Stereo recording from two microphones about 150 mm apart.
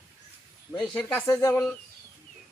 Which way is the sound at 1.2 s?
20° left (ahead or behind).